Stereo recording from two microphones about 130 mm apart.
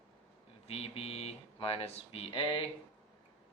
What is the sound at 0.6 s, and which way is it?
Speech, 50° left (ahead or behind).